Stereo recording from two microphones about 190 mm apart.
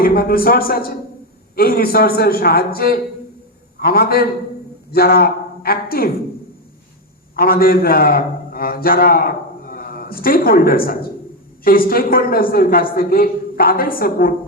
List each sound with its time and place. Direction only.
0.0 s a woman's voice: 50° left (ahead or behind)
7.3 s a man's voice: 50° left (ahead or behind)